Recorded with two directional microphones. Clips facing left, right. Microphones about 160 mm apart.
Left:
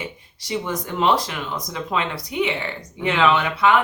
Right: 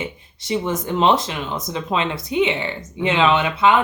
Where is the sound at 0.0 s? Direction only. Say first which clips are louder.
Right 4 dB; 25° right (ahead or behind).